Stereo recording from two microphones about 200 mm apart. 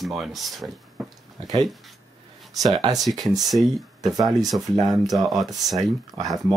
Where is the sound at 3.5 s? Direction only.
Centre (ahead or behind).